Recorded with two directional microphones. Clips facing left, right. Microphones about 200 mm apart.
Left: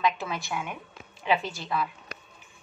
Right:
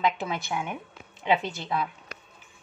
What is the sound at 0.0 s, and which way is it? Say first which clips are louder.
Speech: right 1 dB; 25° right (ahead or behind).